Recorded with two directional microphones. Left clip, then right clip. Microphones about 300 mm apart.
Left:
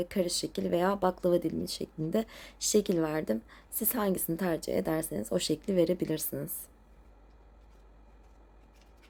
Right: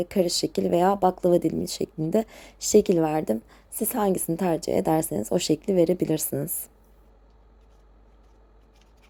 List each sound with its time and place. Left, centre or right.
0.0 s speech: centre